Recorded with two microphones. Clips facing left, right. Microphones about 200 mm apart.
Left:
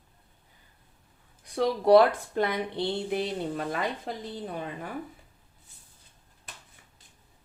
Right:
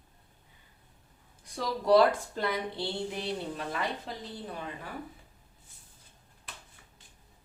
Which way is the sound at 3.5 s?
45° left (ahead or behind).